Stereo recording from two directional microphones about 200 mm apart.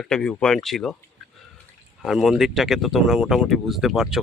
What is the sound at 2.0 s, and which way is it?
Speech, centre (ahead or behind).